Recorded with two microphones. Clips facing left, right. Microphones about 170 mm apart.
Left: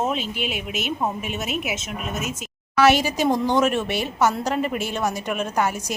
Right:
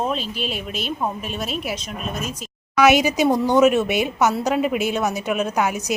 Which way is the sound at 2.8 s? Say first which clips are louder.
Right 2 dB; 10° right (ahead or behind).